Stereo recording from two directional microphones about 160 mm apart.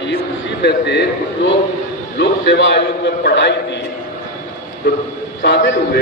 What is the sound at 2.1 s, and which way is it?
Speech, 90° left.